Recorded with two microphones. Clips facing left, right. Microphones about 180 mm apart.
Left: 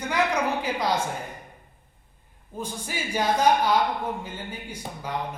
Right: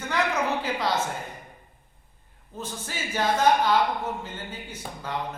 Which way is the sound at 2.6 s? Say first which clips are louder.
Left 2 dB; 10° left (ahead or behind).